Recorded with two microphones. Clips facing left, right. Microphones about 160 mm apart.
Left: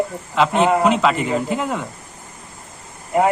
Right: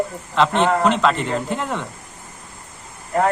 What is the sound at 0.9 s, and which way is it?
Speech, 5° left (ahead or behind).